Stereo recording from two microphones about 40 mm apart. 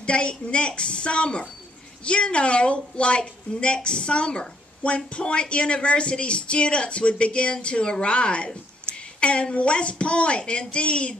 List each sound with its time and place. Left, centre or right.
0.0 s a woman's voice: left